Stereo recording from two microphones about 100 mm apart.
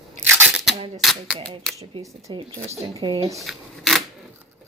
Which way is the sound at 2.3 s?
50° right (ahead or behind).